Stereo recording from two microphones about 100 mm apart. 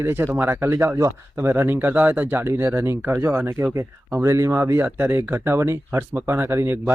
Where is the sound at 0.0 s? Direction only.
25° right (ahead or behind).